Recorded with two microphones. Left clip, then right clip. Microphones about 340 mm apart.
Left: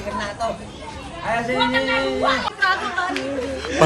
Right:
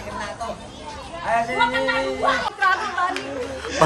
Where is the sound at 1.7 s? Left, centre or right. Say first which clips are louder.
Left 2 dB; centre.